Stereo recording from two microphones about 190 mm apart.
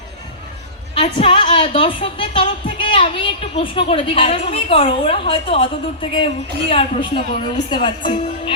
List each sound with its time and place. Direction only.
0.9 s a woman's voice: 30° left (ahead or behind)